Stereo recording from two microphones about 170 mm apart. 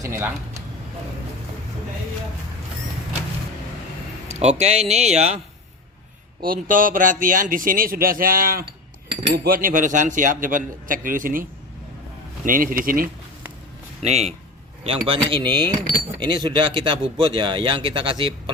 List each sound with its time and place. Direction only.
0.0 s a sound: 15° right (ahead or behind)
4.3 s speech: 40° right (ahead or behind)
6.4 s a man's voice: 55° right (ahead or behind)
12.5 s a man's voice: 55° right (ahead or behind)
14.0 s speech: 40° right (ahead or behind)